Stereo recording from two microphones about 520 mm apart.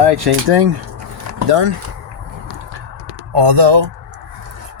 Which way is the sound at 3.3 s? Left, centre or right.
Right.